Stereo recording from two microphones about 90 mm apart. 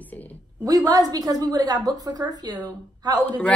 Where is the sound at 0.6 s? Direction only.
45° right (ahead or behind).